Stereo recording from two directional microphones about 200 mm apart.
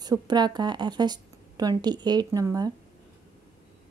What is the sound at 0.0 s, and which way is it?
A woman's voice, 20° right (ahead or behind).